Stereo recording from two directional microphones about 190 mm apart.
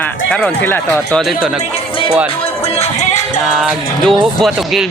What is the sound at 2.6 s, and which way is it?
Music, 35° left (ahead or behind).